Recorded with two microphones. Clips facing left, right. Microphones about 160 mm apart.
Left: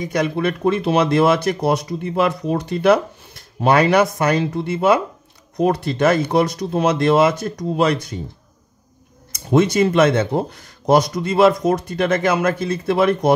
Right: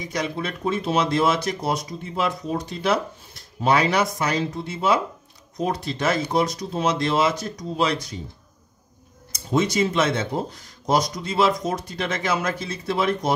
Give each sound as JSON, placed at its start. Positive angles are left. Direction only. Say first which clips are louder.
{"t": 0.0, "sound": "speech", "louder": "left 8 dB", "side_deg": 55}
{"t": 9.3, "sound": "speech", "louder": "left 6 dB", "side_deg": 60}